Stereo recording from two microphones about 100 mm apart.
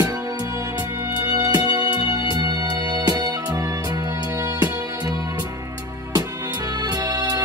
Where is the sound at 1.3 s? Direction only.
40° right (ahead or behind).